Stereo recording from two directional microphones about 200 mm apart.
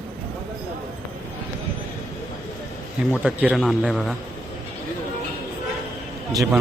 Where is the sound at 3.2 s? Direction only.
5° right (ahead or behind).